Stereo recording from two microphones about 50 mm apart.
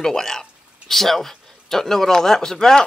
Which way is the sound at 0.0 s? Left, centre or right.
Centre.